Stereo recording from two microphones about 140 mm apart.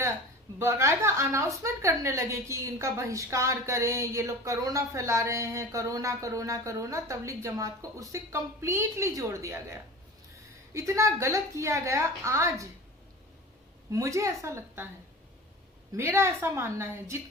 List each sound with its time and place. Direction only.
0.6 s a woman's voice: 20° right (ahead or behind)
10.8 s a woman's voice: 20° right (ahead or behind)
13.9 s a woman's voice: 20° right (ahead or behind)
16.0 s a woman's voice: 20° right (ahead or behind)